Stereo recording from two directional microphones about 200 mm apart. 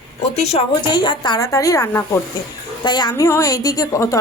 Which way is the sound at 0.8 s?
20° left (ahead or behind).